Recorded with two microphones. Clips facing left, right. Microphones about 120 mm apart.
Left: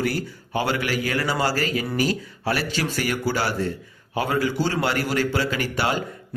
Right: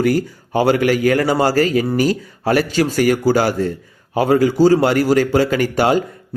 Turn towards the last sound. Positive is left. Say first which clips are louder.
# right 9 dB
turn(degrees=-45)  # may be behind; listen again after turning